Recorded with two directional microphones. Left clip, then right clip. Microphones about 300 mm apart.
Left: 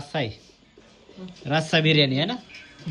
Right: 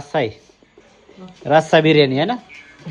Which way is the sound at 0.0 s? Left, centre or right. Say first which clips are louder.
Right 8 dB; centre.